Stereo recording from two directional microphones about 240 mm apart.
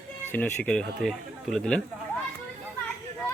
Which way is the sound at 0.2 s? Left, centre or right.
Centre.